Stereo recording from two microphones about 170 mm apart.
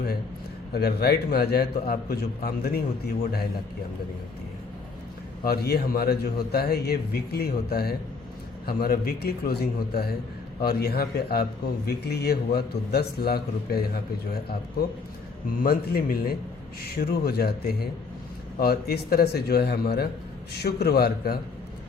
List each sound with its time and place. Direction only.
0.7 s a man's voice: 70° left (ahead or behind)
5.5 s a man's voice: 65° left (ahead or behind)